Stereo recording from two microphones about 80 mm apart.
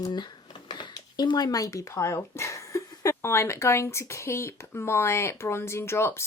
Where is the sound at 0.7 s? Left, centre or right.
Left.